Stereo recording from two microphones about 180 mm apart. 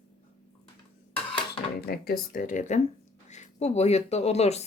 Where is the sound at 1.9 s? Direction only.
55° left (ahead or behind).